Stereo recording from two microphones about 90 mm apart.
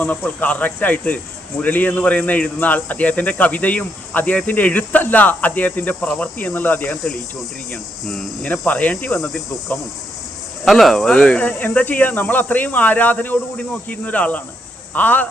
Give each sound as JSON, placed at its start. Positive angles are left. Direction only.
{"t": 0.0, "sound": "speech", "side_deg": 15}
{"t": 8.0, "sound": "cricket", "side_deg": 5}
{"t": 8.6, "sound": "speech", "side_deg": 15}
{"t": 10.7, "sound": "speech", "side_deg": 0}